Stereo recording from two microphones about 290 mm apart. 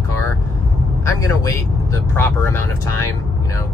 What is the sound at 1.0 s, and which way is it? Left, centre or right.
Vehicle, centre.